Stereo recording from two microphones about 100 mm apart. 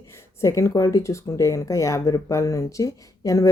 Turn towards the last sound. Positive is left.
turn(degrees=35)  # may be behind; listen again after turning